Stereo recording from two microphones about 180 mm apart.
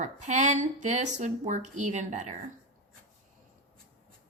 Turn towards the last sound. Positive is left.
turn(degrees=-40)  # may be behind; listen again after turning